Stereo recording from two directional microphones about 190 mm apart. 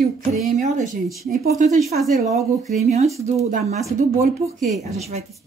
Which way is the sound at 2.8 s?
35° right (ahead or behind).